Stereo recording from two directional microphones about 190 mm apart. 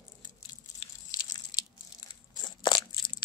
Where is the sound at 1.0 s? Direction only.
20° left (ahead or behind).